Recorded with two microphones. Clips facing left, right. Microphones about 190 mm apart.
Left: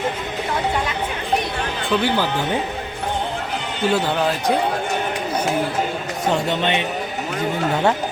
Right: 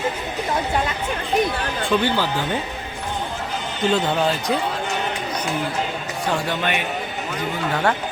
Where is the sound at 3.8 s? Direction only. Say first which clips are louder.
Even; 5° left (ahead or behind).